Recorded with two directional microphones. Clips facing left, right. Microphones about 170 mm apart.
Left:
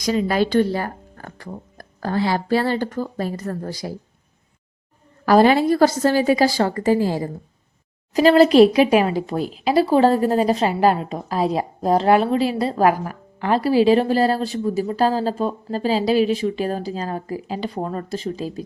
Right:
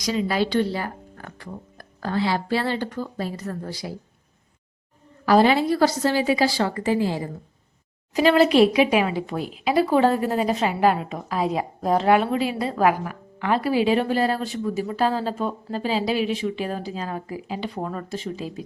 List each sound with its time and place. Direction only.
0.0 s speech: 50° left (ahead or behind)
5.2 s speech: 50° left (ahead or behind)